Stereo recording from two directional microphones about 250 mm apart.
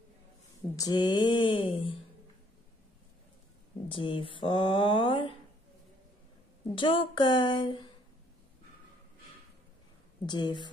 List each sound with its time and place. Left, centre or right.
0.7 s speech: centre
3.9 s speech: left
6.7 s speech: centre
10.2 s a woman's voice: centre